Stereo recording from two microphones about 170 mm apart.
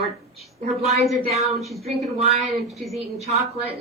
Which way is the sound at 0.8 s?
Centre (ahead or behind).